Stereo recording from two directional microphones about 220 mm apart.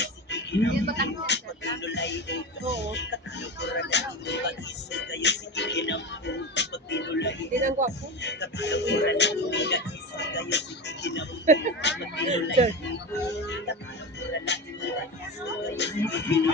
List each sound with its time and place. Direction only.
0.0 s speech: 50° left (ahead or behind)
7.8 s speech: 35° right (ahead or behind)
8.2 s speech: 50° left (ahead or behind)
12.8 s music: 50° left (ahead or behind)